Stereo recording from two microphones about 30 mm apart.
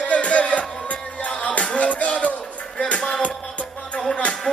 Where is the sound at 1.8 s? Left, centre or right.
Left.